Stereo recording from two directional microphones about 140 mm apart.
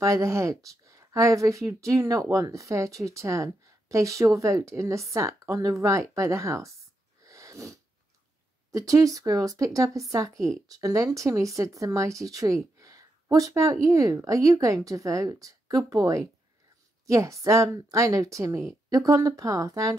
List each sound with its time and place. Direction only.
0.0 s speech: 20° right (ahead or behind)
7.2 s sneeze: 20° right (ahead or behind)
8.7 s speech: 25° right (ahead or behind)